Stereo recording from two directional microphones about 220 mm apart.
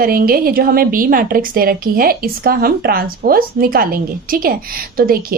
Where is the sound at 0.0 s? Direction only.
40° right (ahead or behind).